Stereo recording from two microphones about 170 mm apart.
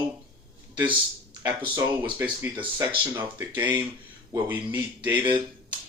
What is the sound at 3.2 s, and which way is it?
Speech, 10° right (ahead or behind).